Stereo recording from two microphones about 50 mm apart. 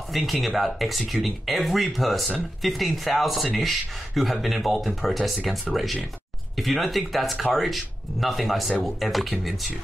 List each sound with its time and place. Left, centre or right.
0.1 s speech: centre